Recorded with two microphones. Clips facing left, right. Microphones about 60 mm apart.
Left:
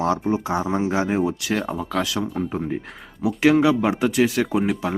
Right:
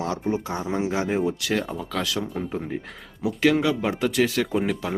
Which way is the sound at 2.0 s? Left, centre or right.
Centre.